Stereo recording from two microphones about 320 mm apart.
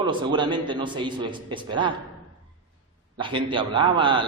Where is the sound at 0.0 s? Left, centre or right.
Centre.